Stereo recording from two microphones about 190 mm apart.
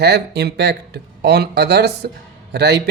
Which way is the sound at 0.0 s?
60° right (ahead or behind).